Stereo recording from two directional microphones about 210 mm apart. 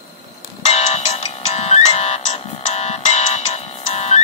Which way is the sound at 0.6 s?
30° left (ahead or behind).